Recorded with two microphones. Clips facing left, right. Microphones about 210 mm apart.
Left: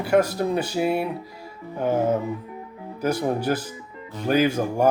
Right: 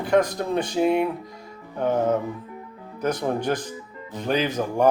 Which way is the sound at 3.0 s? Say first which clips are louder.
Left 1 dB; 10° left (ahead or behind).